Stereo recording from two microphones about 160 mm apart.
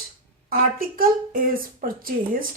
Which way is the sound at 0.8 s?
60° right (ahead or behind).